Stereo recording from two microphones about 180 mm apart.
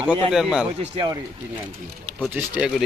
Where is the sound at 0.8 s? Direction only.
25° right (ahead or behind).